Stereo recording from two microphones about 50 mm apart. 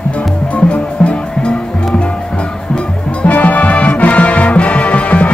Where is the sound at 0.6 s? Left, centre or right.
Left.